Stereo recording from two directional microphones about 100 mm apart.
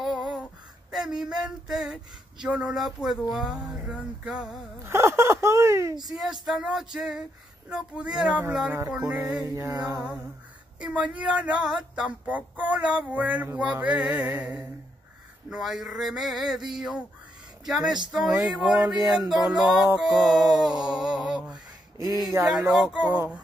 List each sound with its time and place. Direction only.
0.0 s female singing: centre (ahead or behind)
0.9 s speech: 5° right (ahead or behind)
4.8 s speech: 25° right (ahead or behind)
6.0 s speech: 5° right (ahead or behind)
7.7 s a sound: 10° right (ahead or behind)
9.4 s music: 30° right (ahead or behind)
10.8 s a sound: 10° right (ahead or behind)
15.5 s speech: centre (ahead or behind)
20.5 s a sound: 5° right (ahead or behind)
20.9 s speech: 5° right (ahead or behind)
22.4 s speech: 25° right (ahead or behind)
22.7 s a sound: 5° right (ahead or behind)